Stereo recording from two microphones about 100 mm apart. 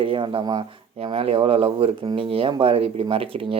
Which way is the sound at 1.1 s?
70° right (ahead or behind).